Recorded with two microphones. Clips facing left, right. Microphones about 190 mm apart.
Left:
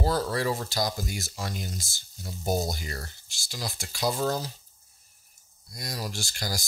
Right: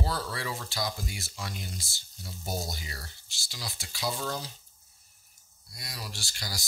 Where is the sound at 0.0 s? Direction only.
45° left (ahead or behind).